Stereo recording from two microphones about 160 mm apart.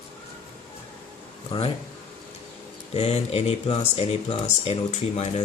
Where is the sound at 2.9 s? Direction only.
40° left (ahead or behind).